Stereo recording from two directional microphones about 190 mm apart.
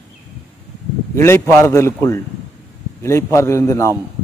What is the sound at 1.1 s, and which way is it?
Speech, 15° left (ahead or behind).